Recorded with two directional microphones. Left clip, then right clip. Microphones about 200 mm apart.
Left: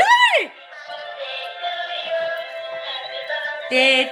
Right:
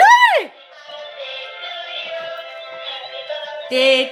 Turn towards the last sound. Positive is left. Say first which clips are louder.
# right 1 dB
turn(degrees=-20)  # may be behind; listen again after turning